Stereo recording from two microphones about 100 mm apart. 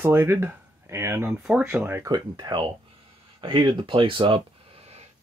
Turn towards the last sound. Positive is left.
turn(degrees=-90)